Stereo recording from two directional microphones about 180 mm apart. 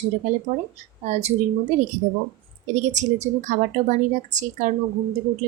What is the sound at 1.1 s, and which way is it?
Speech, 35° right (ahead or behind).